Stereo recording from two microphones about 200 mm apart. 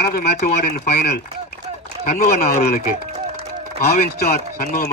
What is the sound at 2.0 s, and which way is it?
Speech, 35° left (ahead or behind).